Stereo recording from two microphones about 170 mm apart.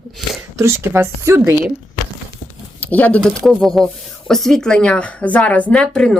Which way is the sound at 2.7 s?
10° left (ahead or behind).